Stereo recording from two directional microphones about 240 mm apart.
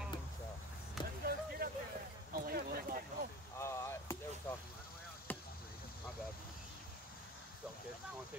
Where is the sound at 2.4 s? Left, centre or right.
Right.